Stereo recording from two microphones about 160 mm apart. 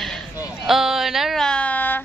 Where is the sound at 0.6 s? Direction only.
Centre (ahead or behind).